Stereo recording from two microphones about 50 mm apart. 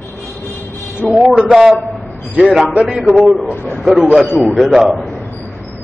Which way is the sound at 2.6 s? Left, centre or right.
Right.